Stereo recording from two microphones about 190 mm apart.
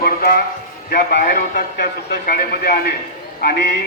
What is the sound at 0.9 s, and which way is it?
A man's voice, 55° left (ahead or behind).